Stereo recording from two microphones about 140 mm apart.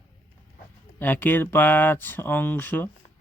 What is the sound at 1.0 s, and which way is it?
Speech, 10° left (ahead or behind).